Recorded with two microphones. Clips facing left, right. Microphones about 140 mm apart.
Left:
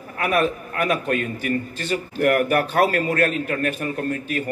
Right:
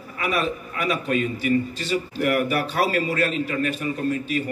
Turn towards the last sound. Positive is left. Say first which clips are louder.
# right 1 dB
turn(degrees=50)  # may be behind; listen again after turning